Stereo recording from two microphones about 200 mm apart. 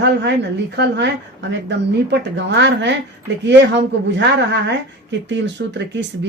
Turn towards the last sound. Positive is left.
turn(degrees=-60)  # may be behind; listen again after turning